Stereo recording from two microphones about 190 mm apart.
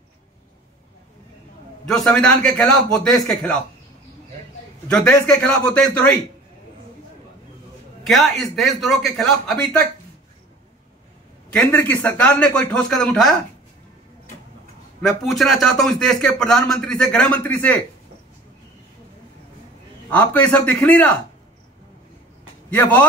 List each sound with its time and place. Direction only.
1.9 s speech: 5° left (ahead or behind)
4.8 s speech: 5° left (ahead or behind)
8.0 s speech: centre (ahead or behind)
11.5 s a man's voice: 10° left (ahead or behind)
15.0 s speech: centre (ahead or behind)
20.1 s a man's voice: 10° left (ahead or behind)
22.7 s a man's voice: 10° left (ahead or behind)